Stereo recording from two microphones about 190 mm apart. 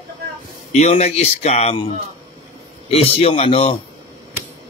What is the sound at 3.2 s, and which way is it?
Speech, 30° left (ahead or behind).